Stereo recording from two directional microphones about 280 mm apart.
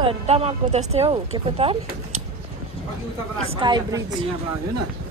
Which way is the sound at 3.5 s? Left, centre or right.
Centre.